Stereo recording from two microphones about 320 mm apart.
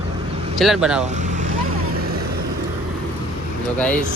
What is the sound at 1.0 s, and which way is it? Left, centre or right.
Vehicle, right.